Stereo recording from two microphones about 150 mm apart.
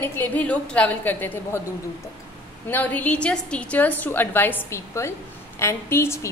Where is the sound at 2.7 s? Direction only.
10° left (ahead or behind).